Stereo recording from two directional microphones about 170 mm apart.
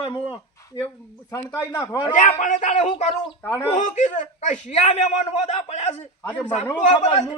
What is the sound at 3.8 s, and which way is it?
A man's voice, 45° left (ahead or behind).